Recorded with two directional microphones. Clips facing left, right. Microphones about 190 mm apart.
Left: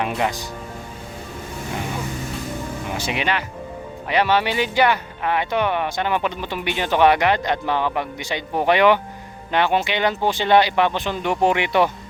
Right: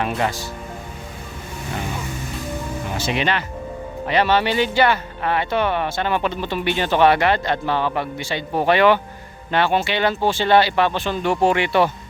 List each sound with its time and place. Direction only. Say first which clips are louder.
0.2 s speech: even; 15° left (ahead or behind)
3.0 s speech: right 2 dB; 10° left (ahead or behind)